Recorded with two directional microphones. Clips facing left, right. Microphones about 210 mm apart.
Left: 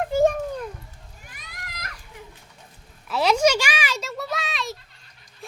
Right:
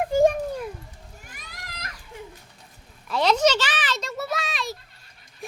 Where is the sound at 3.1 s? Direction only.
10° left (ahead or behind).